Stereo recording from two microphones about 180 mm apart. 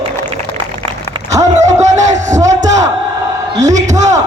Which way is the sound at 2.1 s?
40° right (ahead or behind).